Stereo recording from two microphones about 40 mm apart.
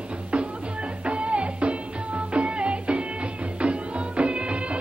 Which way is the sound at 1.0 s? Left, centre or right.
Right.